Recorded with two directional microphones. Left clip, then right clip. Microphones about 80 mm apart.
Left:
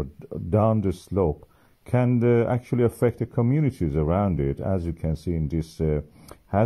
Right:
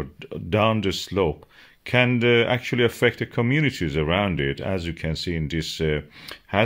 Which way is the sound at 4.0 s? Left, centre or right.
Centre.